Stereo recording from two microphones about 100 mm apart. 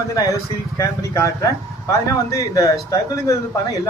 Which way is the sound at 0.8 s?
30° left (ahead or behind).